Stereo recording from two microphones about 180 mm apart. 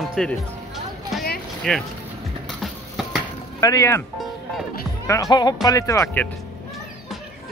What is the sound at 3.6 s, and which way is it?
Speech, 20° left (ahead or behind).